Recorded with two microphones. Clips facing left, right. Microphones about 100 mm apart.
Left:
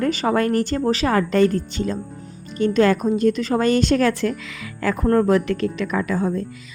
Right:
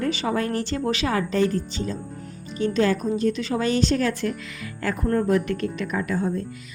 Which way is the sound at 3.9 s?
85° left.